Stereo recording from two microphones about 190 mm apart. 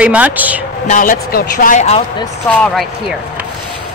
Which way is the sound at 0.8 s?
45° left (ahead or behind).